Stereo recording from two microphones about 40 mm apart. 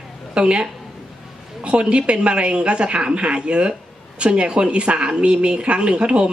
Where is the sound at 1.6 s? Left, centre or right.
Right.